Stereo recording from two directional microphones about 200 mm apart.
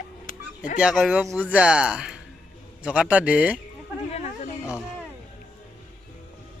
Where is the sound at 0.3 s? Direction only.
40° left (ahead or behind).